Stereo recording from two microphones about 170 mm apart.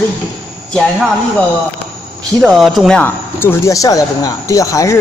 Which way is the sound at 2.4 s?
Centre (ahead or behind).